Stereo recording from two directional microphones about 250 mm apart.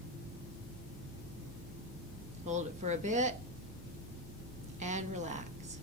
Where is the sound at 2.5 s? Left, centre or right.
Right.